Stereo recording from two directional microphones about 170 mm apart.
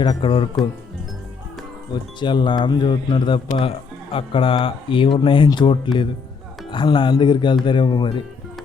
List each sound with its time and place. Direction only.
0.0 s speech: 30° left (ahead or behind)
1.9 s speech: 25° left (ahead or behind)